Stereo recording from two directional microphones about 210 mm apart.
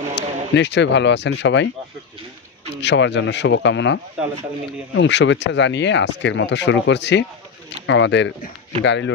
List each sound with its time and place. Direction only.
0.1 s speech: 55° left (ahead or behind)
2.8 s speech: 55° left (ahead or behind)